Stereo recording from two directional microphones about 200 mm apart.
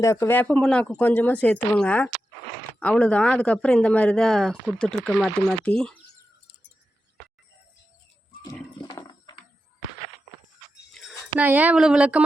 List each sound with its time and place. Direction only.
0.0 s speech: 15° left (ahead or behind)
8.4 s a sound: 20° left (ahead or behind)
11.1 s speech: 5° right (ahead or behind)